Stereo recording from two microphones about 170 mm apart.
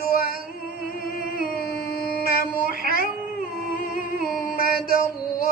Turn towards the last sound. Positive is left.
turn(degrees=55)  # may be behind; listen again after turning